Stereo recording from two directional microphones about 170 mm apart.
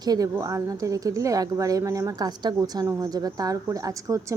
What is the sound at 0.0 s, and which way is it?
A woman's voice, 20° right (ahead or behind).